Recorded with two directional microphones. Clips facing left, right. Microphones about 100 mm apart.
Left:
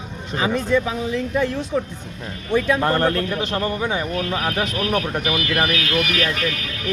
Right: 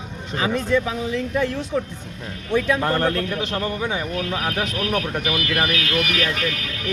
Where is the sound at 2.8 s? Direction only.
45° left (ahead or behind).